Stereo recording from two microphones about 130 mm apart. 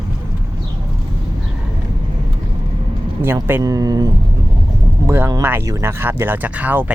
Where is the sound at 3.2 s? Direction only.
20° right (ahead or behind).